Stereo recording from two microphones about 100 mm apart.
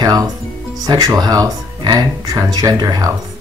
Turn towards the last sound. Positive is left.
turn(degrees=-40)  # may be behind; listen again after turning